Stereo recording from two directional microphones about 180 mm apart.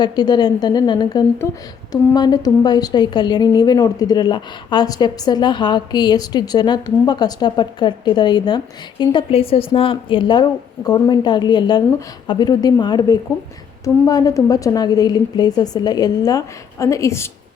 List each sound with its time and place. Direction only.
0.0 s a woman's voice: 25° left (ahead or behind)